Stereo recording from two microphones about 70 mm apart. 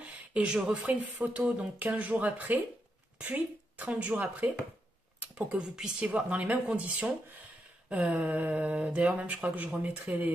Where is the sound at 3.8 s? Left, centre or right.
Right.